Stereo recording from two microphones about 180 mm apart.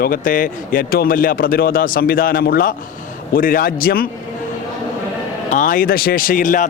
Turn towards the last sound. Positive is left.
turn(degrees=45)  # may be behind; listen again after turning